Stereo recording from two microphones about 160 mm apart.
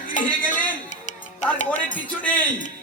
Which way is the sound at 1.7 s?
10° left (ahead or behind).